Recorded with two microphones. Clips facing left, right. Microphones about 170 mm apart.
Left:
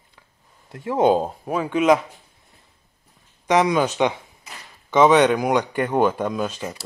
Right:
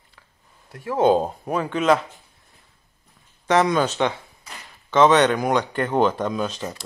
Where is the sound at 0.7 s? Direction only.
20° left (ahead or behind).